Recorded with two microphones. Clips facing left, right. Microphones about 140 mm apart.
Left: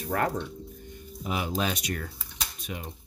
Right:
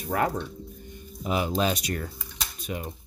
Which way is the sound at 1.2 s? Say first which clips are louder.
Right 4 dB; 25° right (ahead or behind).